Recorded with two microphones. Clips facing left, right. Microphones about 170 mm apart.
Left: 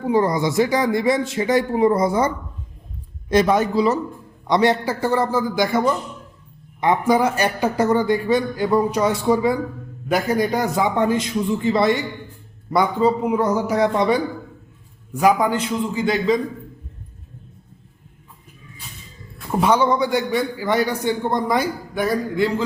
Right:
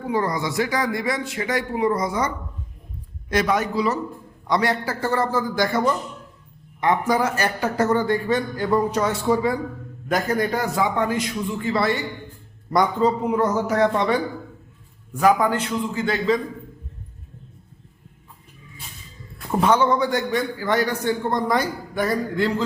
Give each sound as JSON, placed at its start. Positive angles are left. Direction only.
{"t": 0.0, "sound": "speech", "side_deg": 25}
{"t": 12.7, "sound": "speech", "side_deg": 5}
{"t": 19.5, "sound": "a man's voice", "side_deg": 10}